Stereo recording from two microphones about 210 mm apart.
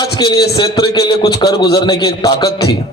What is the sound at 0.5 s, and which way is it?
A man's voice, 20° left (ahead or behind).